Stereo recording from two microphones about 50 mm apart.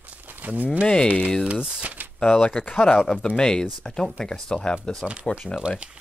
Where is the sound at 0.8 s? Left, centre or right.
Centre.